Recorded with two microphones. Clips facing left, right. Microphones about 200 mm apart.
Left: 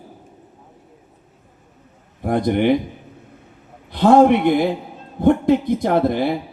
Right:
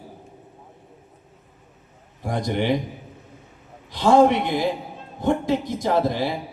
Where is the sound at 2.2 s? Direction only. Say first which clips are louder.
Left 6 dB; 55° left (ahead or behind).